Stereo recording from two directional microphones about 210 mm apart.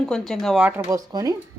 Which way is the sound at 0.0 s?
Centre (ahead or behind).